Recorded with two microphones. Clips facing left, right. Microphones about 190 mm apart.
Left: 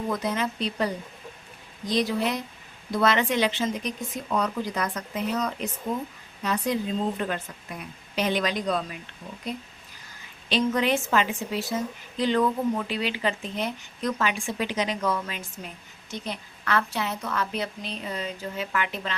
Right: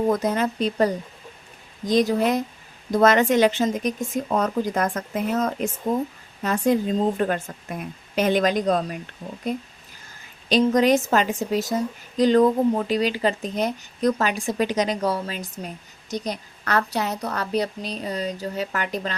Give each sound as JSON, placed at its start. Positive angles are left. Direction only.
{"t": 0.1, "sound": "speech", "side_deg": -45}